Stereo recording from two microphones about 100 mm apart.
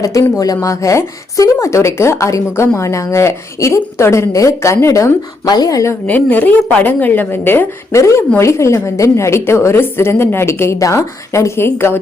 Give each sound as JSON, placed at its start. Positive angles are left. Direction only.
{"t": 0.0, "sound": "speech", "side_deg": 35}
{"t": 6.1, "sound": "a woman's voice", "side_deg": 15}